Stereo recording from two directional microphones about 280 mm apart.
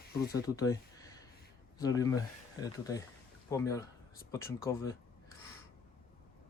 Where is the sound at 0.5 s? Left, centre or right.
Centre.